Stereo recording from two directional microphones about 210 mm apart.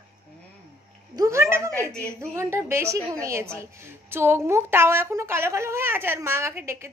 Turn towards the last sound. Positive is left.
turn(degrees=-10)  # may be behind; listen again after turning